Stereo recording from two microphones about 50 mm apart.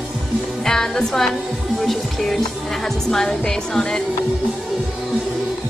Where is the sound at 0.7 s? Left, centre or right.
Centre.